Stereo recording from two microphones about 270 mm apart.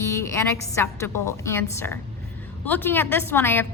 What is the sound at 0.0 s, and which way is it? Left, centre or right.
A woman's voice, centre.